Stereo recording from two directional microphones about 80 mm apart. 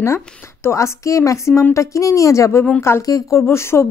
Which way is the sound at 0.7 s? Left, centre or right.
Left.